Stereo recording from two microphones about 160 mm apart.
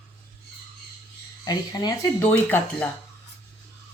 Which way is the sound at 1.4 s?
25° left (ahead or behind).